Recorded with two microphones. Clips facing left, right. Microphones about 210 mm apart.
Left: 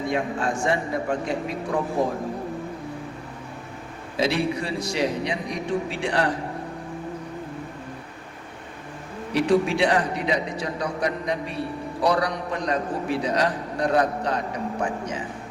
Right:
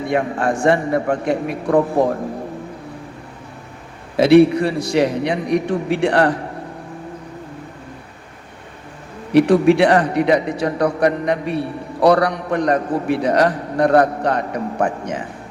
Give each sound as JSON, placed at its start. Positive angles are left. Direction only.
{"t": 0.1, "sound": "a man's voice", "side_deg": -65}
{"t": 4.2, "sound": "a man's voice", "side_deg": -60}
{"t": 9.3, "sound": "a man's voice", "side_deg": -60}